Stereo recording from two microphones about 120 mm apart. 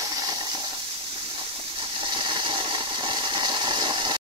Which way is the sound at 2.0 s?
40° right (ahead or behind).